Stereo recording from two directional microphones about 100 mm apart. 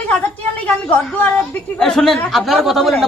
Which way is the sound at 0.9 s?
15° left (ahead or behind).